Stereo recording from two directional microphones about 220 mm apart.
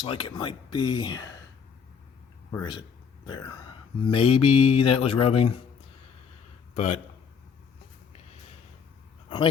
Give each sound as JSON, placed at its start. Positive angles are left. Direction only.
{"t": 0.0, "sound": "speech", "side_deg": 25}
{"t": 2.5, "sound": "speech", "side_deg": 15}
{"t": 6.7, "sound": "speech", "side_deg": 30}